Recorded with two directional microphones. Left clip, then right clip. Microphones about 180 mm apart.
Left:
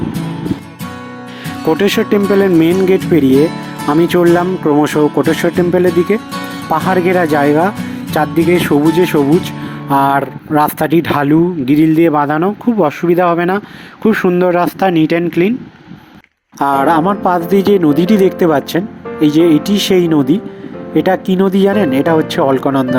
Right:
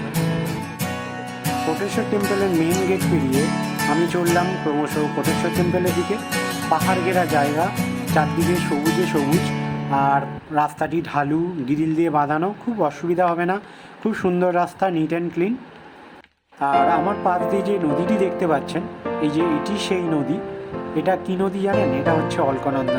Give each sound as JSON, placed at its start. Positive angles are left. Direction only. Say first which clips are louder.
{"t": 1.8, "sound": "speech", "louder": "left 10 dB", "side_deg": 40}
{"t": 16.6, "sound": "speech", "louder": "left 6 dB", "side_deg": 50}